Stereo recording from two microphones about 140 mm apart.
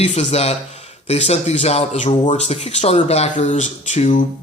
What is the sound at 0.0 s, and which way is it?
Speech, 55° left (ahead or behind).